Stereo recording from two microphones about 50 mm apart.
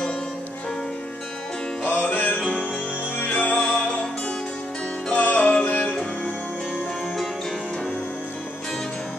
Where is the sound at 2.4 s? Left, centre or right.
Left.